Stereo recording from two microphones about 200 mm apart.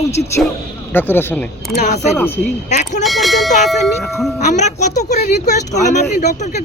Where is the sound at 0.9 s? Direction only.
10° left (ahead or behind).